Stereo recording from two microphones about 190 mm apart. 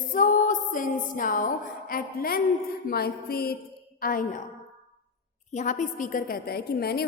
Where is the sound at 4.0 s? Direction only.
45° left (ahead or behind).